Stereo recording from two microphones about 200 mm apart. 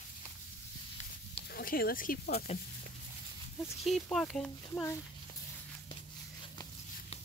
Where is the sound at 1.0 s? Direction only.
35° left (ahead or behind).